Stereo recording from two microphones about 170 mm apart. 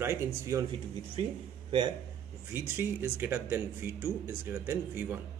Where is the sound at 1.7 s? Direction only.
25° right (ahead or behind).